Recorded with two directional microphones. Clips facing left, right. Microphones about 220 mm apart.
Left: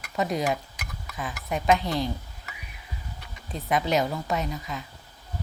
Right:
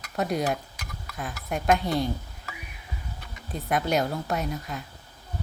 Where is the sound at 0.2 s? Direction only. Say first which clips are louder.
Even; centre (ahead or behind).